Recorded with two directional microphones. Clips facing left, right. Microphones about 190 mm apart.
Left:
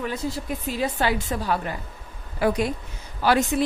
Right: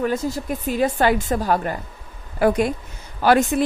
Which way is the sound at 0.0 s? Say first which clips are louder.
Right 6 dB; 45° right (ahead or behind).